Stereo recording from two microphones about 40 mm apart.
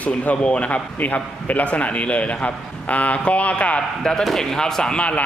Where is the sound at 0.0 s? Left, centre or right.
Left.